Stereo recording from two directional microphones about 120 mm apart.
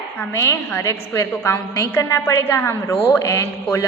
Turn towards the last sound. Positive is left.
turn(degrees=25)  # may be behind; listen again after turning